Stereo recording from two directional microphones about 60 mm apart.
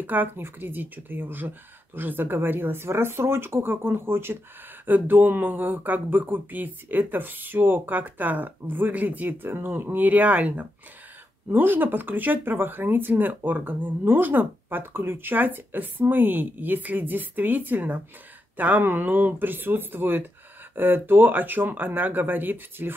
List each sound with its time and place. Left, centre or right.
0.0 s speech: right
4.8 s speech: right